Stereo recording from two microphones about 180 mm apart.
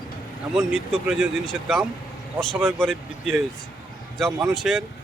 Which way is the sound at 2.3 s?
5° left (ahead or behind).